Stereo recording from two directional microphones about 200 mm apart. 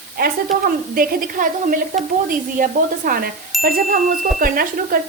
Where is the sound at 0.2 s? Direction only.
50° right (ahead or behind).